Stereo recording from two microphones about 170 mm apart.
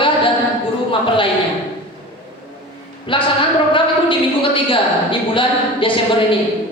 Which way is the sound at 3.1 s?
30° left (ahead or behind).